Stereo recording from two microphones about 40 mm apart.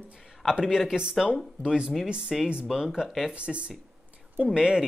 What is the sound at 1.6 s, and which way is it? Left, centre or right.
Speech, right.